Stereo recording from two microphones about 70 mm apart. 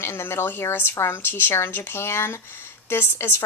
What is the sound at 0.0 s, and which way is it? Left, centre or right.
Speech, left.